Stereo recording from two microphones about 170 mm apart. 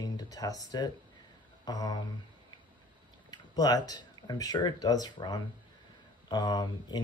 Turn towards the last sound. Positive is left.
turn(degrees=25)  # may be behind; listen again after turning